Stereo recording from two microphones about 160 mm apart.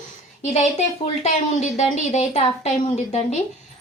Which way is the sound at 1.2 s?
45° left (ahead or behind).